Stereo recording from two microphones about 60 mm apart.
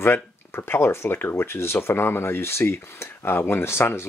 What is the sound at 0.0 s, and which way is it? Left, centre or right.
Speech, left.